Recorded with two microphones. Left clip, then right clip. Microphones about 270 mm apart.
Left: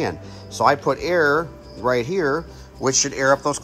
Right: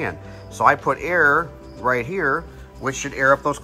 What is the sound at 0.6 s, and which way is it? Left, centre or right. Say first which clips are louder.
Speech: right 1 dB; centre.